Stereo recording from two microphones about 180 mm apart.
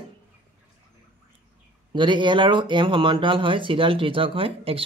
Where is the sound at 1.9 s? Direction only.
25° right (ahead or behind).